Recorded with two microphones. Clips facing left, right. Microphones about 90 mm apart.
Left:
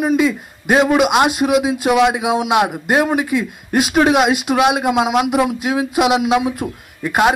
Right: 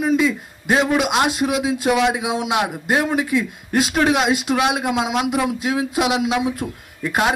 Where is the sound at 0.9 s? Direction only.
55° left (ahead or behind).